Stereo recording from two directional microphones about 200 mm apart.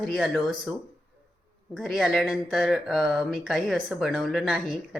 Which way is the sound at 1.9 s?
Centre (ahead or behind).